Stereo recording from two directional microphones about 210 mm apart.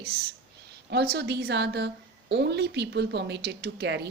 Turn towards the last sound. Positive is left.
turn(degrees=-55)  # may be behind; listen again after turning